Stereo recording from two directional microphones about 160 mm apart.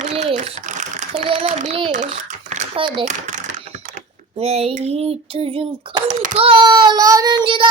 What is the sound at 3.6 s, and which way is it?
Typing, 45° right (ahead or behind).